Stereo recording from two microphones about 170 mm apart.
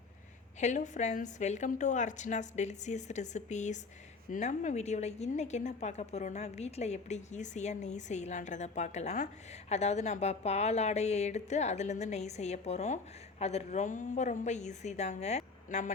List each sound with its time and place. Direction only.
0.6 s a woman's voice: 45° left (ahead or behind)